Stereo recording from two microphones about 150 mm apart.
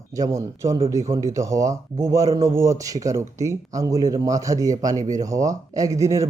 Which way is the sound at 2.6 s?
20° right (ahead or behind).